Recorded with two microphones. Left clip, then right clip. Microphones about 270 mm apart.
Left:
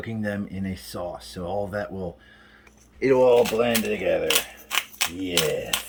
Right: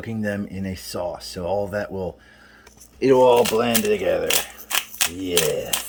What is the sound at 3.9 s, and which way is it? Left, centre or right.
Typewriter, right.